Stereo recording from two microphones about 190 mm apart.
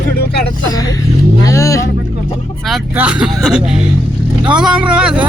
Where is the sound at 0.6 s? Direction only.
20° left (ahead or behind).